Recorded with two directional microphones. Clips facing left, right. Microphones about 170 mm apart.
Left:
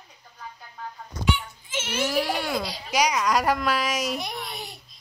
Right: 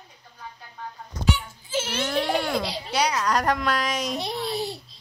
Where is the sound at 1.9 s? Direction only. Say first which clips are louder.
Left 1 dB; 5° left (ahead or behind).